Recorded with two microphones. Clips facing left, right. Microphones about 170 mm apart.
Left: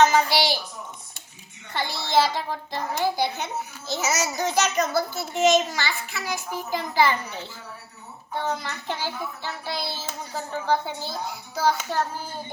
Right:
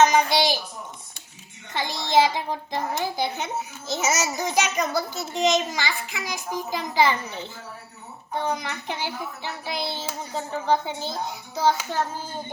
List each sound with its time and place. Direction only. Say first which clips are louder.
0.0 s a woman's voice: right 1 dB; 15° right (ahead or behind)
1.7 s a child's voice: right 1 dB; 15° right (ahead or behind)
8.4 s child singing: left 1 dB; 15° right (ahead or behind)